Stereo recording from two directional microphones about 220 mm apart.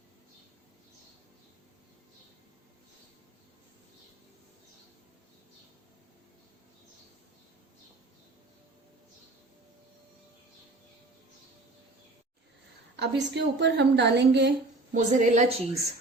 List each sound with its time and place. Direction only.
13.0 s a woman's voice: 50° right (ahead or behind)
14.9 s a woman's voice: 35° right (ahead or behind)